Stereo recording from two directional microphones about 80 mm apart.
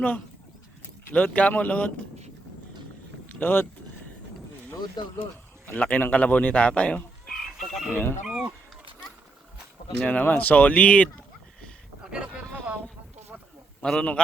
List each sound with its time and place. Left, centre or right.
1.1 s speech: centre
3.4 s speech: left
5.0 s speech: left
5.6 s speech: centre
7.6 s chicken: centre
7.9 s speech: left
8.3 s speech: centre
10.0 s speech: centre
12.1 s a sound: centre
13.8 s speech: centre